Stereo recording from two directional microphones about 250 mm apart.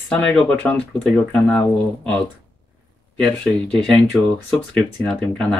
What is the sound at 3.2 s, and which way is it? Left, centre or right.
Speech, centre.